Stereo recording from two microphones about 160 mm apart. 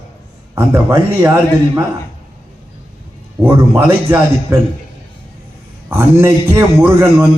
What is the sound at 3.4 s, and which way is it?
A man's voice, 15° right (ahead or behind).